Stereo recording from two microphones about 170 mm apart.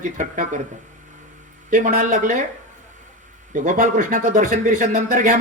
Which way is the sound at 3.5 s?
50° right (ahead or behind).